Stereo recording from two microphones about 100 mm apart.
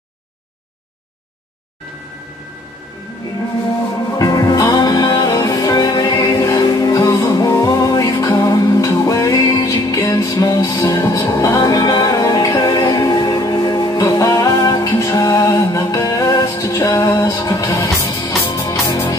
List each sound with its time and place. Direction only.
3.9 s music: 40° left (ahead or behind)